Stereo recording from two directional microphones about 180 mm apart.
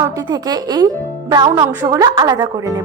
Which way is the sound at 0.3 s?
20° right (ahead or behind).